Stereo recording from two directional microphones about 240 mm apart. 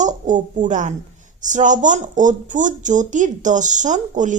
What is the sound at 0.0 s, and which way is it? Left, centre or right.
A child's voice, right.